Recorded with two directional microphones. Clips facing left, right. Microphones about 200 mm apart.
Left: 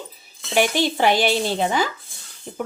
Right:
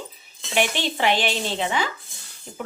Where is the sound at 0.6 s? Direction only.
40° left (ahead or behind).